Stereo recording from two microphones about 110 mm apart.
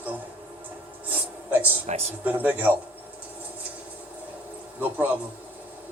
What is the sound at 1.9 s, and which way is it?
Speech, 75° right (ahead or behind).